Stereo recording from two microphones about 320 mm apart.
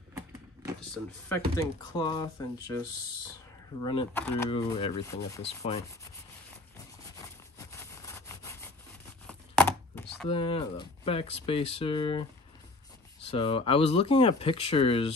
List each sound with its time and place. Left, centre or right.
0.1 s vehicle: centre
1.6 s speech: centre
3.8 s speech: centre
5.6 s rub: centre
7.2 s sawing: centre
9.3 s a sound: centre
10.3 s speech: centre